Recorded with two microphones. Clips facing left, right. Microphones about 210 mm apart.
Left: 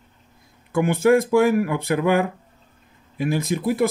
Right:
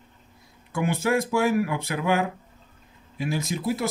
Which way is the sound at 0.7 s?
55° left (ahead or behind).